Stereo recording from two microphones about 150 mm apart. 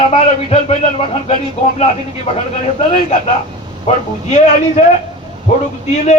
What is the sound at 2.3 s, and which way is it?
Speech, 45° left (ahead or behind).